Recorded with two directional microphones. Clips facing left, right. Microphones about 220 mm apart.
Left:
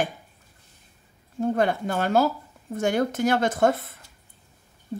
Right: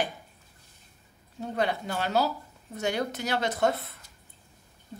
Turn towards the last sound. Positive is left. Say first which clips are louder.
# left 5 dB
turn(degrees=50)  # may be behind; listen again after turning